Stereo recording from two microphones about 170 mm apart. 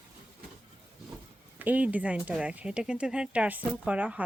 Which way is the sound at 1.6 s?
10° right (ahead or behind).